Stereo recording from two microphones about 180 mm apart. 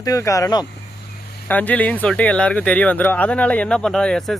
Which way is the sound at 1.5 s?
10° left (ahead or behind).